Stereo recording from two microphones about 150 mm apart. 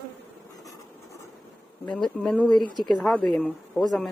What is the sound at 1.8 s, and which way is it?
Speech, 5° left (ahead or behind).